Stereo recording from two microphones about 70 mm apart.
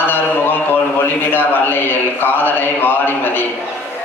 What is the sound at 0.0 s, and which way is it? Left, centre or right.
A man's voice, left.